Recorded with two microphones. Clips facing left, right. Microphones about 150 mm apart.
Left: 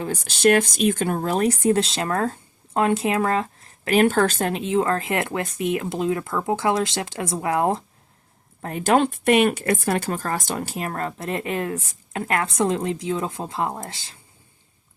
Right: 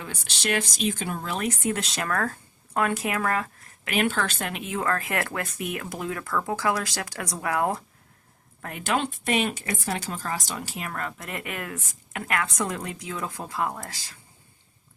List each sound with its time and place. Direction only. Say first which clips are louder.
0.0 s speech: left 13 dB; 45° left (ahead or behind); by 7.9 s 25° left (ahead or behind)
8.6 s speech: left 8 dB; 40° left (ahead or behind)